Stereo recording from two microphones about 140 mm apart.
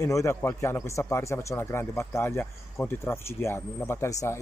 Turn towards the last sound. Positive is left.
turn(degrees=20)  # may be behind; listen again after turning